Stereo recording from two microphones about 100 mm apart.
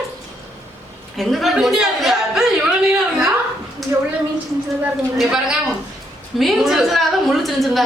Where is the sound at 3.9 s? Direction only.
30° right (ahead or behind).